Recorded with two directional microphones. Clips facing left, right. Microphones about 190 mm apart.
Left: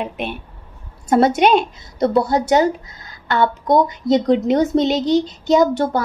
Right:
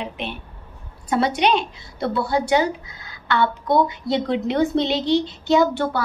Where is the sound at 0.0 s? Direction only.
50° left (ahead or behind).